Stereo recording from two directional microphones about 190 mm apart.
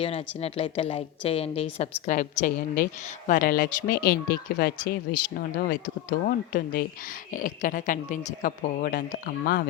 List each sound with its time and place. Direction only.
0.0 s a woman's voice: 30° left (ahead or behind); by 9.6 s 55° left (ahead or behind)